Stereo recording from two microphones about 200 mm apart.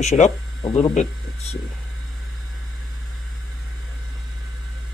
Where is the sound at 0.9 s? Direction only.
30° left (ahead or behind).